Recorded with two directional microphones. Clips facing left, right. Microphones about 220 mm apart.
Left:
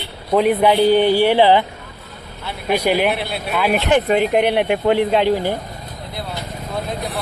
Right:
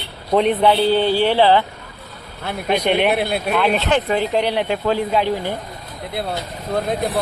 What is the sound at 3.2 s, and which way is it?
Speech, 50° right (ahead or behind).